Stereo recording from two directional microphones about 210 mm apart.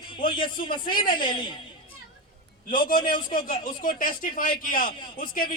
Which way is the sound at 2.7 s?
40° left (ahead or behind).